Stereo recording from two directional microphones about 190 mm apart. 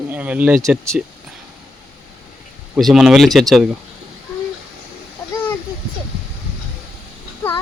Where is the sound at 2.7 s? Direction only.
Centre (ahead or behind).